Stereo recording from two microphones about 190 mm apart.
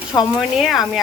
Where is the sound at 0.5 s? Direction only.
Centre (ahead or behind).